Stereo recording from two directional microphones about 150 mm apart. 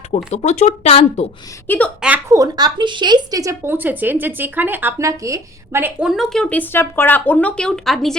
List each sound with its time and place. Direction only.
0.1 s speech: 50° left (ahead or behind)
1.6 s speech: 15° left (ahead or behind)
2.0 s speech: 10° right (ahead or behind)
2.3 s speech: 25° right (ahead or behind)
6.1 s speech: centre (ahead or behind)